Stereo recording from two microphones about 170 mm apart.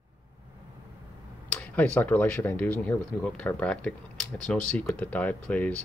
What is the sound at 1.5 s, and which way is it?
Speech, 10° left (ahead or behind).